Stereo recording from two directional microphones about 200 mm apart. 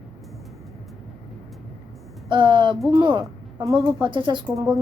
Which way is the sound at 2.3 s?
25° right (ahead or behind).